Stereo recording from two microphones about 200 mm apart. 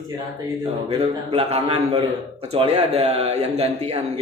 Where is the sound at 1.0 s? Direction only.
30° right (ahead or behind).